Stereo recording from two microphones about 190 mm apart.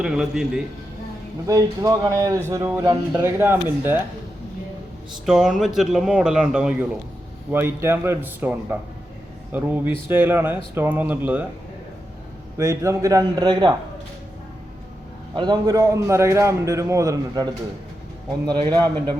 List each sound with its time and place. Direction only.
0.0 s a man's voice: 5° right (ahead or behind)
1.5 s a man's voice: 20° right (ahead or behind)
5.2 s a man's voice: centre (ahead or behind)
12.5 s a man's voice: 15° right (ahead or behind)
15.4 s a man's voice: 20° right (ahead or behind)